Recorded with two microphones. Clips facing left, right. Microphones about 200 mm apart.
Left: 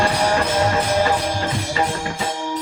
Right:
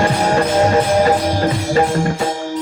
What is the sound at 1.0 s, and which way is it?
Music, 45° right (ahead or behind).